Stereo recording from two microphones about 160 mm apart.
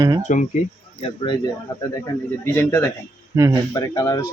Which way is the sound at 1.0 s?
30° left (ahead or behind).